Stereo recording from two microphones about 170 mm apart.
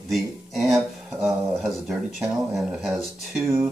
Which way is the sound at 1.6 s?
Centre (ahead or behind).